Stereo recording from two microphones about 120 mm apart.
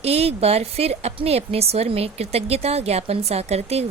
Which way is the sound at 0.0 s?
60° right (ahead or behind).